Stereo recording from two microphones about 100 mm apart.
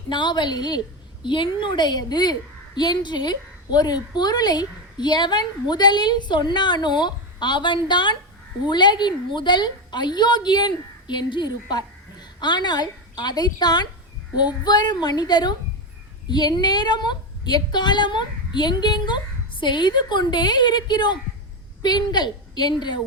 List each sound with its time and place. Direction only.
0.1 s a woman's voice: 50° left (ahead or behind)